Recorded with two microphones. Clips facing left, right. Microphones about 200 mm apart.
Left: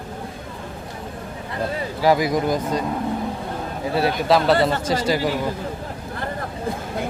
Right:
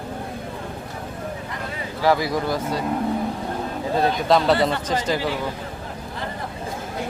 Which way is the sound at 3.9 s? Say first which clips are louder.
Even; 5° left (ahead or behind).